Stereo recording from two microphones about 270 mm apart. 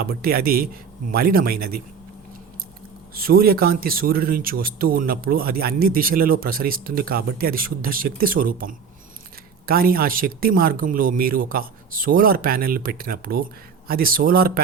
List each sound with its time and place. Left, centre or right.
0.0 s speech: right
3.2 s speech: right